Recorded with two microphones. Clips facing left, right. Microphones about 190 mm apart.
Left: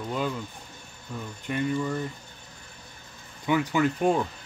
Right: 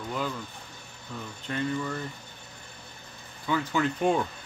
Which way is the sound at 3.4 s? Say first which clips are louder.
Left 3 dB; 15° left (ahead or behind).